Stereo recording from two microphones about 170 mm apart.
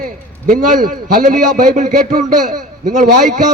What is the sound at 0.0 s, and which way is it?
A man's voice, 55° right (ahead or behind).